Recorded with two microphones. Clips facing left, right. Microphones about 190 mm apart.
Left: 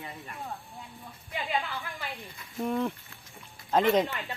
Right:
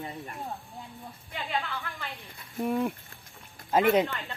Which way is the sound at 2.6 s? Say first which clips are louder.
Right 1 dB; 10° right (ahead or behind).